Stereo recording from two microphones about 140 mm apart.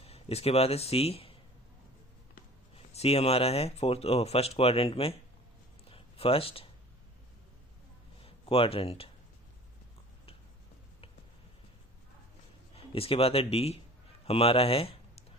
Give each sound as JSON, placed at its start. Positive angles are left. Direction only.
{"t": 0.0, "sound": "speech", "side_deg": 45}
{"t": 2.7, "sound": "speech", "side_deg": 45}
{"t": 5.9, "sound": "a sound", "side_deg": 40}
{"t": 8.2, "sound": "speech", "side_deg": 40}
{"t": 12.7, "sound": "speech", "side_deg": 40}